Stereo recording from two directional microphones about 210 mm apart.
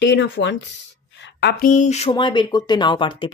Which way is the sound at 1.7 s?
35° left (ahead or behind).